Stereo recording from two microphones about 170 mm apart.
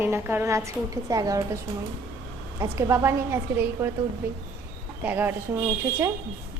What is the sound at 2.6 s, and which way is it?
A woman's voice, 20° right (ahead or behind).